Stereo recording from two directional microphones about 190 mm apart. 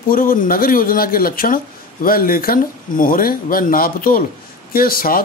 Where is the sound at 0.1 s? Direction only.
45° left (ahead or behind).